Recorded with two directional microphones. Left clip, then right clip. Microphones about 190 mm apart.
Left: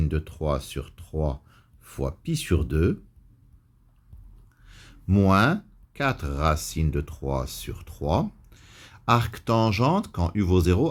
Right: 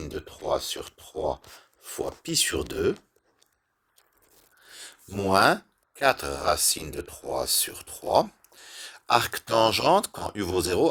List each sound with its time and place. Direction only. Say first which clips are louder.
0.0 s speech: left 3 dB; 35° right (ahead or behind)
4.6 s speech: left 1 dB; 30° right (ahead or behind)